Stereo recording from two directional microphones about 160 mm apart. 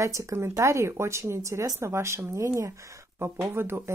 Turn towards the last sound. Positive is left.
turn(degrees=-15)  # may be behind; listen again after turning